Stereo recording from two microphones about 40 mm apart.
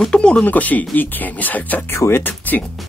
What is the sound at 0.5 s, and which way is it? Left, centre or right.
Speech, left.